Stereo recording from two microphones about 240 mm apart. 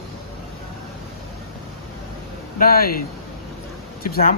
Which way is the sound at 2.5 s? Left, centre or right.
Left.